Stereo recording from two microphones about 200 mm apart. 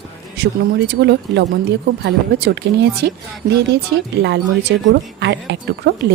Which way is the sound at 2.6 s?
65° right (ahead or behind).